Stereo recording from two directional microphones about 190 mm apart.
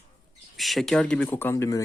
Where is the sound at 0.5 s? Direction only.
Centre (ahead or behind); by 1.8 s 15° left (ahead or behind).